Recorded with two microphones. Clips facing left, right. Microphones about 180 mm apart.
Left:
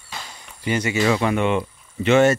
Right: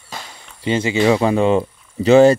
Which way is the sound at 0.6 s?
25° right (ahead or behind).